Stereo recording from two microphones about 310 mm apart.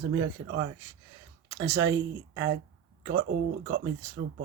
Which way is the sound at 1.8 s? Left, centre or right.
Right.